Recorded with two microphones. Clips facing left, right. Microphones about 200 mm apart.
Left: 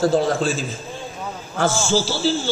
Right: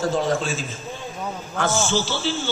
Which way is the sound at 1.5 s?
30° left (ahead or behind).